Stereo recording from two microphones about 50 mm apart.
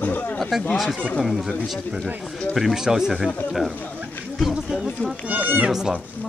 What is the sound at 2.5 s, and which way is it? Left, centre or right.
Speech, centre.